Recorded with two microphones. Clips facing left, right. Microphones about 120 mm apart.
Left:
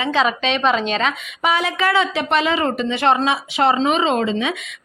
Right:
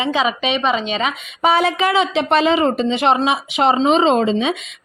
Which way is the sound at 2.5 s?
20° right (ahead or behind).